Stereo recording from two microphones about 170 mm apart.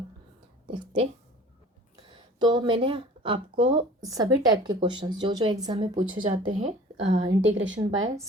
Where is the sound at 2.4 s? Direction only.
30° right (ahead or behind).